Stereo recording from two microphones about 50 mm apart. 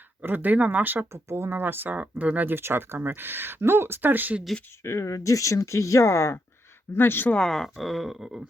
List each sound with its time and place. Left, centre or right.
0.2 s speech: right
1.1 s speech: right
2.0 s speech: right
2.5 s speech: right
4.8 s speech: left
6.9 s speech: left
7.3 s speech: centre